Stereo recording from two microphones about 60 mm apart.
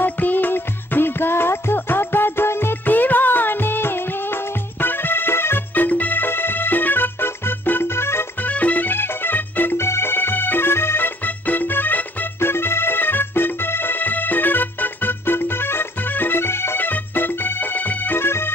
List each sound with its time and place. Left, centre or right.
0.0 s music: left
5.9 s music: left
8.4 s music: left
9.8 s music: left
11.2 s music: left